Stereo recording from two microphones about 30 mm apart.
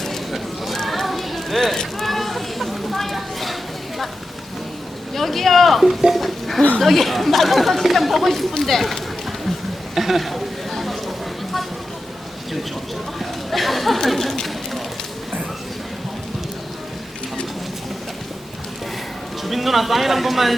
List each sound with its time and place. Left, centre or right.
0.3 s a sound: centre
5.1 s speech: centre
6.7 s speech: centre
9.9 s a sound: centre
13.1 s chatter: centre
19.5 s speech: centre